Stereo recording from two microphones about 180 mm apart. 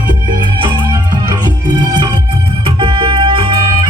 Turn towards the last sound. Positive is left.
turn(degrees=-30)  # may be behind; listen again after turning